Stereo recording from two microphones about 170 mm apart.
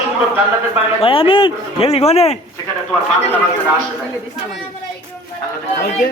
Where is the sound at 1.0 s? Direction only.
30° left (ahead or behind).